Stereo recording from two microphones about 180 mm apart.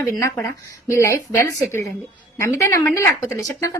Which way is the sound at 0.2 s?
15° left (ahead or behind).